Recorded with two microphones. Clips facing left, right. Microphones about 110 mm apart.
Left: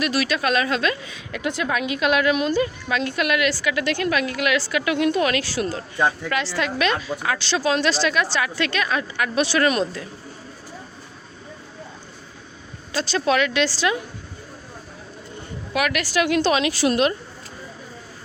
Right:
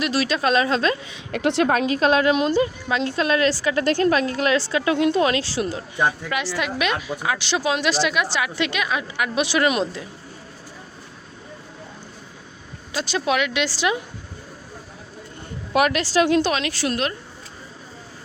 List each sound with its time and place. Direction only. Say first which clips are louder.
0.0 s a woman's voice: right 1 dB; 30° right (ahead or behind)
1.3 s a woman's voice: right 6 dB; 65° right (ahead or behind)
1.6 s a woman's voice: right 2 dB; 35° right (ahead or behind); by 10.1 s 20° right (ahead or behind)
12.9 s speech: left 2 dB; 15° right (ahead or behind)
15.7 s a woman's voice: right 4 dB; 35° right (ahead or behind)
16.5 s a woman's voice: left 4 dB; 10° left (ahead or behind)